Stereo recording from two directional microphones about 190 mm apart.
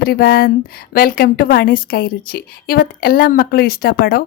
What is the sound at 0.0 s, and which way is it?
A woman's voice, 55° left (ahead or behind).